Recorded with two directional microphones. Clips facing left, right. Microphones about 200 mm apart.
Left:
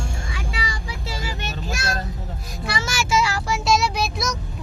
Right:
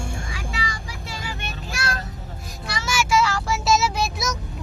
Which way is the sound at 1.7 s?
25° left (ahead or behind).